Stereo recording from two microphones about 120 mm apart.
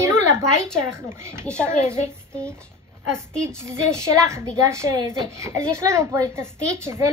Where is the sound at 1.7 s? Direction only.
20° right (ahead or behind).